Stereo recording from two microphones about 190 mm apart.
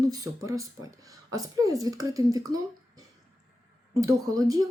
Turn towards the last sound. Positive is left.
turn(degrees=-20)  # may be behind; listen again after turning